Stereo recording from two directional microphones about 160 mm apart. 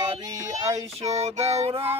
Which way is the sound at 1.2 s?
40° right (ahead or behind).